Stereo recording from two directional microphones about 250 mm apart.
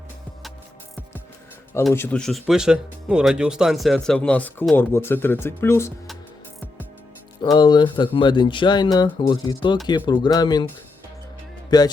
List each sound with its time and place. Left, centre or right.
1.8 s speech: centre
7.5 s speech: centre
11.7 s speech: centre